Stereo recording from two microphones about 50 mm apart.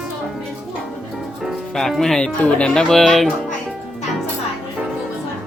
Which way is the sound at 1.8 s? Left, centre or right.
Centre.